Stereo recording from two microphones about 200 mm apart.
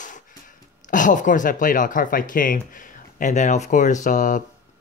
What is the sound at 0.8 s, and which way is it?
Speech, 40° left (ahead or behind).